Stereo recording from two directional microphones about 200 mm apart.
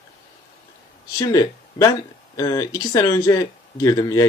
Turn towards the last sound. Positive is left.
turn(degrees=15)  # may be behind; listen again after turning